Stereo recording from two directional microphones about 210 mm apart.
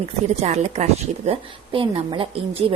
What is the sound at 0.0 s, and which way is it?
A woman's voice, 30° right (ahead or behind).